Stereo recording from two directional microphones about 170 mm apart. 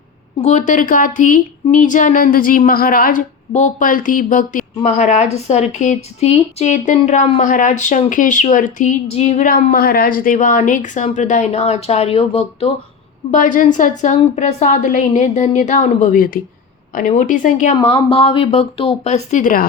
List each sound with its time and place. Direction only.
0.4 s a woman's voice: 45° left (ahead or behind)
13.3 s speech: 50° left (ahead or behind)
17.7 s a woman's voice: 30° left (ahead or behind); by 19.6 s 50° left (ahead or behind)